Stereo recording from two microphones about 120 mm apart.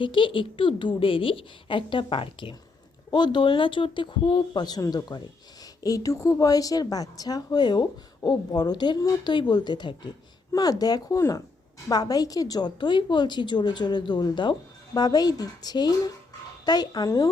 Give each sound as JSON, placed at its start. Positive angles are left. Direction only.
{"t": 0.0, "sound": "a woman's voice", "side_deg": 45}